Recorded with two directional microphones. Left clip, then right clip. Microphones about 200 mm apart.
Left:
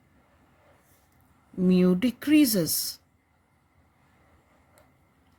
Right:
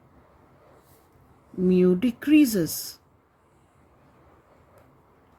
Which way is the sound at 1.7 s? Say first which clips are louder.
Right 3 dB; 45° left (ahead or behind).